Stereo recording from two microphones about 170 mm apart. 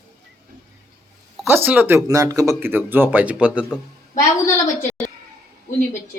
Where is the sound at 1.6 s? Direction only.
10° right (ahead or behind).